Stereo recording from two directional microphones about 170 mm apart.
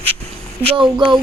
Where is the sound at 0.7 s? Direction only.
30° right (ahead or behind).